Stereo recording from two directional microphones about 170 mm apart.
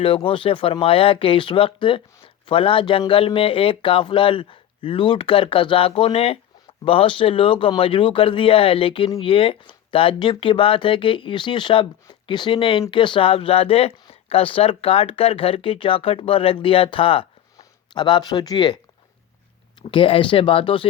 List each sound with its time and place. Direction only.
0.0 s speech: 30° left (ahead or behind)
19.8 s speech: 30° left (ahead or behind)